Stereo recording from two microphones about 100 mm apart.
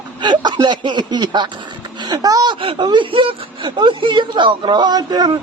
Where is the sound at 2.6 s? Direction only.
55° right (ahead or behind).